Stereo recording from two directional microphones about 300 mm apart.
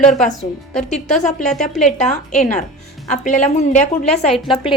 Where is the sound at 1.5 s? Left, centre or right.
Centre.